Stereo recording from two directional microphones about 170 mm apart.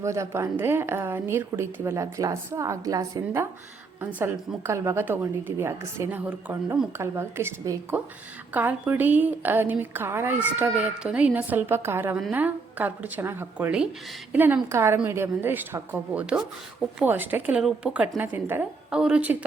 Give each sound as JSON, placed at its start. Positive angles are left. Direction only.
{"t": 0.0, "sound": "a woman's voice", "side_deg": -15}